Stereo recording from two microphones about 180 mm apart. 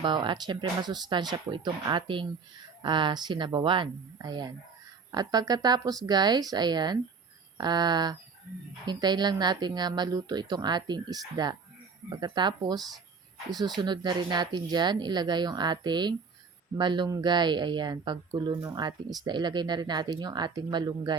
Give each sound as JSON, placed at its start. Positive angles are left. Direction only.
{"t": 0.0, "sound": "speech", "side_deg": -25}